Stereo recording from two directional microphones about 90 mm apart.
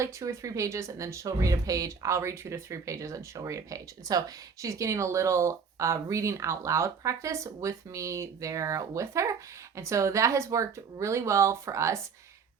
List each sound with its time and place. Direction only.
0.0 s speech: 35° right (ahead or behind)